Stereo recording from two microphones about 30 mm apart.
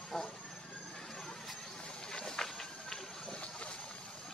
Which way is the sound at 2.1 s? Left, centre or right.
Left.